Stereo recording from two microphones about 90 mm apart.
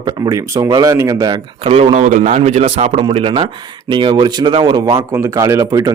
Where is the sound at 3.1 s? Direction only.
90° right.